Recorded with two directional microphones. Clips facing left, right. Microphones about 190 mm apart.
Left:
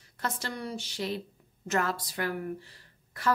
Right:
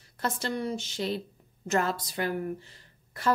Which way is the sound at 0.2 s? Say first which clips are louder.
Right 4 dB; 25° right (ahead or behind).